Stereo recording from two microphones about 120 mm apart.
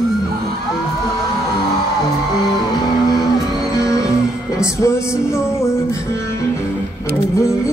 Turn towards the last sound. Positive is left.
turn(degrees=25)  # may be behind; listen again after turning